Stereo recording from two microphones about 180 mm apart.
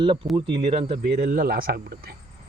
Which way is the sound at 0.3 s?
30° right (ahead or behind).